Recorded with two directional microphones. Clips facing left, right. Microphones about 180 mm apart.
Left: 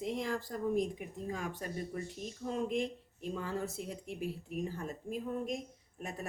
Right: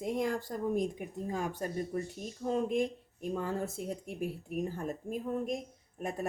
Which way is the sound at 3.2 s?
50° right (ahead or behind).